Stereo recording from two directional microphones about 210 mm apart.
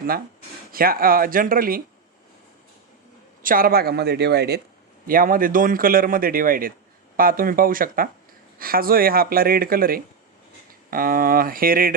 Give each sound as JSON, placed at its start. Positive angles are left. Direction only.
{"t": 0.7, "sound": "speech", "side_deg": -45}
{"t": 3.4, "sound": "speech", "side_deg": -45}